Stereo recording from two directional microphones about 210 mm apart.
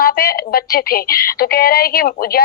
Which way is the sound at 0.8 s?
45° left (ahead or behind).